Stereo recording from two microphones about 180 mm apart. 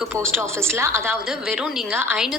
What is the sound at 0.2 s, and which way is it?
Speech, 15° right (ahead or behind).